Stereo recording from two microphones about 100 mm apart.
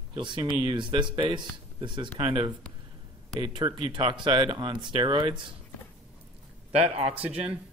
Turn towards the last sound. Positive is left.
turn(degrees=-15)  # may be behind; listen again after turning